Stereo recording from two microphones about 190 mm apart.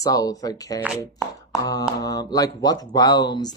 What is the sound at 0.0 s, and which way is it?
Speech, 20° left (ahead or behind).